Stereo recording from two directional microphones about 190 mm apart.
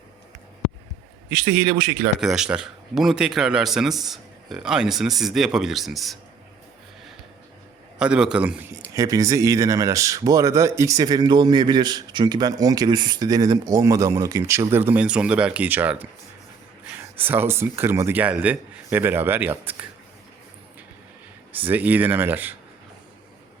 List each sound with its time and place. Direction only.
2.2 s a man's voice: 5° right (ahead or behind)
7.9 s a man's voice: 5° right (ahead or behind)
21.5 s speech: 10° right (ahead or behind)